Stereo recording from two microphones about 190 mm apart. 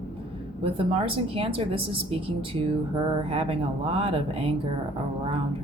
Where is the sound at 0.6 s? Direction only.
30° right (ahead or behind).